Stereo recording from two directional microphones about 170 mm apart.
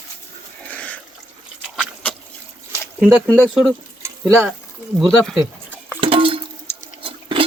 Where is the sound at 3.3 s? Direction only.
Centre (ahead or behind).